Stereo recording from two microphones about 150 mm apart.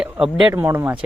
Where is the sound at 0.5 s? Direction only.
15° right (ahead or behind).